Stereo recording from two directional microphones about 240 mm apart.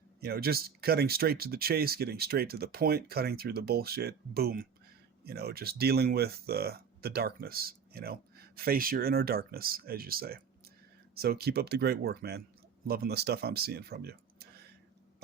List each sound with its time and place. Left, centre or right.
0.2 s speech: right